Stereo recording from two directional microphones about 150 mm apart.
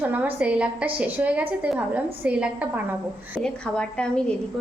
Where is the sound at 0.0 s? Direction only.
10° right (ahead or behind).